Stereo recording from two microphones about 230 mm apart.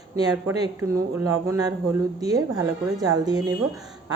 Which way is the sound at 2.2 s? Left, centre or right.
Centre.